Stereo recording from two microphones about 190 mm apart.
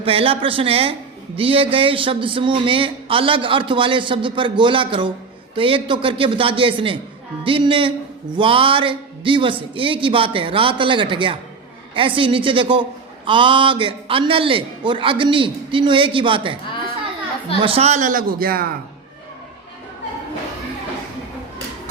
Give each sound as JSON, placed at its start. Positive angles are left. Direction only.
{"t": 0.0, "sound": "speech", "side_deg": -30}
{"t": 17.6, "sound": "a man's voice", "side_deg": -30}